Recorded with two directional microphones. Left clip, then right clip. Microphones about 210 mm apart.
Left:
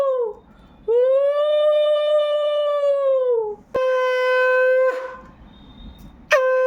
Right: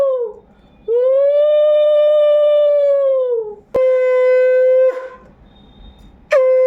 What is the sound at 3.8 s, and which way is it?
Shofar, 20° left (ahead or behind).